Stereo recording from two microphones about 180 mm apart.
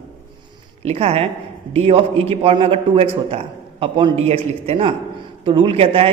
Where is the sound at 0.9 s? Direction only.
35° right (ahead or behind).